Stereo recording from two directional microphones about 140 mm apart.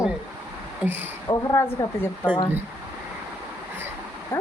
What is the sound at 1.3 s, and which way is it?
A woman's voice, 25° left (ahead or behind).